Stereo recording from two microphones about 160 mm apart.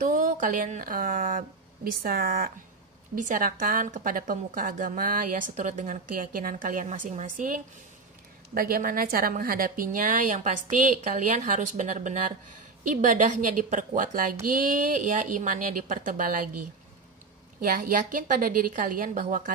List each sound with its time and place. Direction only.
0.0 s a woman's voice: 55° right (ahead or behind)
17.6 s a woman's voice: 65° right (ahead or behind)